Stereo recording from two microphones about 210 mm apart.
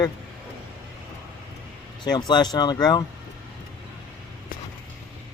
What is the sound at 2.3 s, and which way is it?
Speech, 20° left (ahead or behind).